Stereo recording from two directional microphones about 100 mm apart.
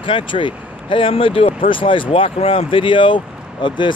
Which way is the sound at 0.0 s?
55° left (ahead or behind).